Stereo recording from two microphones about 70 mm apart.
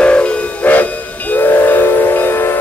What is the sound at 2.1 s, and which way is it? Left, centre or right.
Train, left.